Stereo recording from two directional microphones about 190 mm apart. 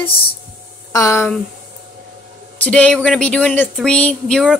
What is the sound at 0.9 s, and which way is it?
Speech, 15° left (ahead or behind).